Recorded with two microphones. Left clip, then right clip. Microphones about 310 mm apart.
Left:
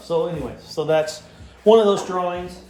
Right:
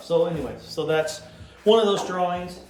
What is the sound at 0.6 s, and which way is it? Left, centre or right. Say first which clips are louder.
Speech: left 4 dB; centre.